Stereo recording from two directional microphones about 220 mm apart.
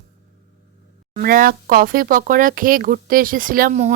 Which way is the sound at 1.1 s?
40° right (ahead or behind).